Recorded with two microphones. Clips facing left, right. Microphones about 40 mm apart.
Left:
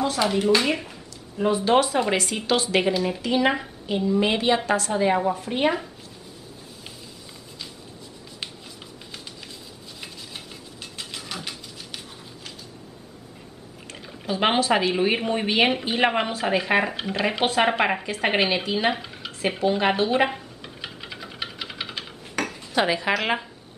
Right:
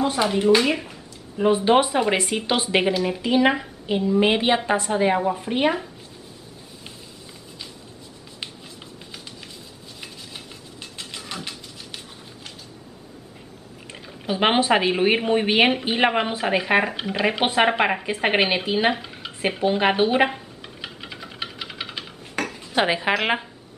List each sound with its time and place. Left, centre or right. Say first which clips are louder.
0.0 s speech: right 2 dB; centre
1.4 s speech: right 2 dB; right
2.9 s speech: right 2 dB; centre
11.0 s a sound: right 1 dB; centre
14.2 s speech: right 2 dB; centre
18.9 s a sound: right 1 dB; centre
19.6 s speech: right 2 dB; centre
20.2 s music: even; centre
22.7 s speech: right 2 dB; centre